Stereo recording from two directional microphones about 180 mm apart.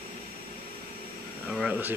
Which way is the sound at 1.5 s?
5° right (ahead or behind).